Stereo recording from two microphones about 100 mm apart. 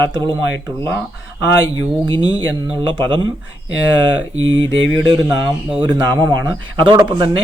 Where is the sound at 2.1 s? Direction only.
55° right (ahead or behind).